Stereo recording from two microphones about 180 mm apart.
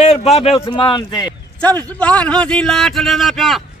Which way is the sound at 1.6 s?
10° left (ahead or behind).